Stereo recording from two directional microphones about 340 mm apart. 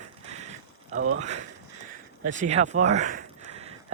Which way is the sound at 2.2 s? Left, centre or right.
Right.